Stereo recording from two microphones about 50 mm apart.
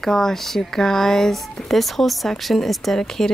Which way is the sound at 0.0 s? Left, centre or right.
Centre.